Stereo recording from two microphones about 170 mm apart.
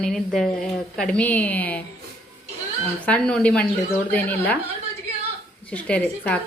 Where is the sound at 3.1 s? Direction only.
5° left (ahead or behind).